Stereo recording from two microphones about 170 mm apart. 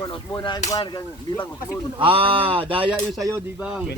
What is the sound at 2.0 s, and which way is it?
Speech, 30° right (ahead or behind).